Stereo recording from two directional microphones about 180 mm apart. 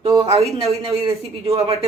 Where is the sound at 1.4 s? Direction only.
35° right (ahead or behind).